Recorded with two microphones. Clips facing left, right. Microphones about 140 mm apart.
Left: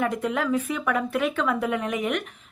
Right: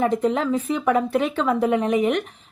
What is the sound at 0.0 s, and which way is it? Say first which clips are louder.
Speech: right 5 dB; 30° right (ahead or behind).